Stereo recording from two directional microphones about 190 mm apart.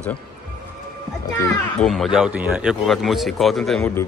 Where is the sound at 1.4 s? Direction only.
5° left (ahead or behind).